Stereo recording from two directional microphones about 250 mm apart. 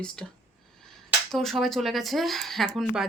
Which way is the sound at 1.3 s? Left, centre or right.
Centre.